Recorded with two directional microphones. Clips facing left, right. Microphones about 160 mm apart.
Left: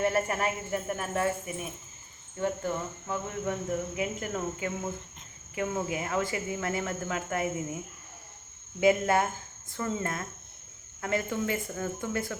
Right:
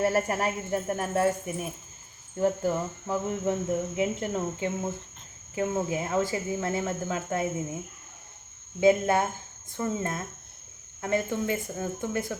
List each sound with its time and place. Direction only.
0.0 s speech: 35° right (ahead or behind)
2.4 s speech: 35° right (ahead or behind)
8.8 s speech: 20° right (ahead or behind)